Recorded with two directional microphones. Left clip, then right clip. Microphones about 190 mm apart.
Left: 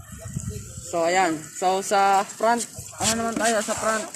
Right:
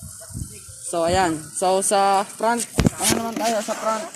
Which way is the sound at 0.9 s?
40° right (ahead or behind).